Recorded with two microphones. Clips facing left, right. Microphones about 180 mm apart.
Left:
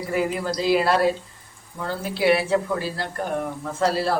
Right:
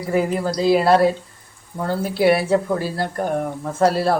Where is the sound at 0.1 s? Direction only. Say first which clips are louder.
Right 5 dB; 40° right (ahead or behind).